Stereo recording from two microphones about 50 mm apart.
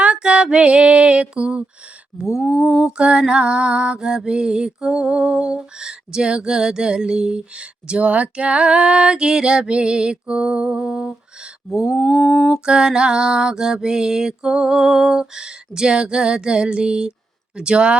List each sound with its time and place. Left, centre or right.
0.0 s music: centre
2.1 s mantra: centre
2.4 s a sound: centre
2.6 s mantra: centre
12.0 s a sound: left
12.6 s mantra: centre
17.6 s speech: centre